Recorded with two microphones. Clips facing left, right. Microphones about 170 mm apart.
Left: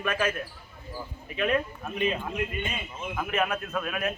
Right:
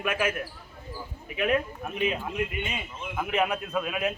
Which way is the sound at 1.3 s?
10° right (ahead or behind).